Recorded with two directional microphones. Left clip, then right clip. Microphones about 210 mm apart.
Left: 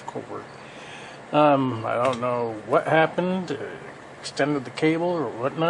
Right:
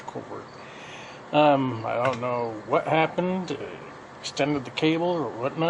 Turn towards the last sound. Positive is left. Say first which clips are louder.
# left 2 dB
turn(degrees=15)  # may be behind; listen again after turning